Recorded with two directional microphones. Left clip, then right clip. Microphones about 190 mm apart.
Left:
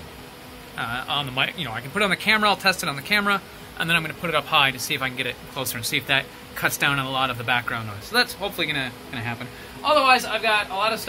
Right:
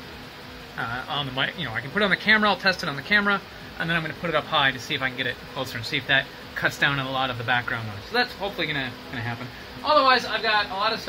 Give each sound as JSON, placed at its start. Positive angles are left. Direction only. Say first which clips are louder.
{"t": 0.7, "sound": "speech", "louder": "left 2 dB", "side_deg": 10}
{"t": 9.8, "sound": "speech", "louder": "left 1 dB", "side_deg": 10}